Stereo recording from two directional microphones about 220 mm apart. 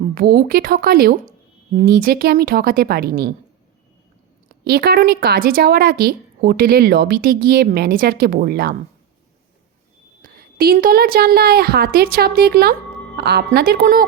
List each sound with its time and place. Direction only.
0.1 s a woman's voice: 40° right (ahead or behind)
4.6 s a woman's voice: 45° right (ahead or behind)
10.2 s a woman's voice: 45° right (ahead or behind)